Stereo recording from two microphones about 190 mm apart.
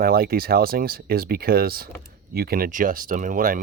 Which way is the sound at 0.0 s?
50° right (ahead or behind).